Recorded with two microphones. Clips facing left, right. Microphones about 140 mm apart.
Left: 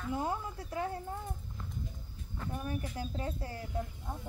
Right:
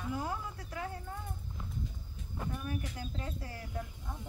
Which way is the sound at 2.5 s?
30° left (ahead or behind).